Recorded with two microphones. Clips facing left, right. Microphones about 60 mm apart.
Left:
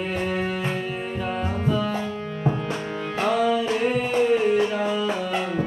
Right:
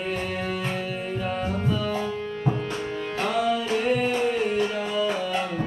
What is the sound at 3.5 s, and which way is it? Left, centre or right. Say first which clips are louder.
Music: left 2 dB; centre.